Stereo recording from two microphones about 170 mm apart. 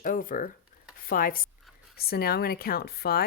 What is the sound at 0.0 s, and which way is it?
A woman's voice, 55° left (ahead or behind).